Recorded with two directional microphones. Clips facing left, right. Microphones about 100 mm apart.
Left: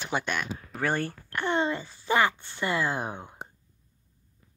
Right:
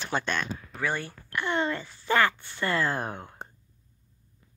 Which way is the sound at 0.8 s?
45° left (ahead or behind).